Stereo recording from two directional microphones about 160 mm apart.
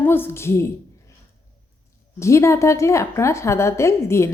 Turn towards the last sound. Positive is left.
turn(degrees=15)  # may be behind; listen again after turning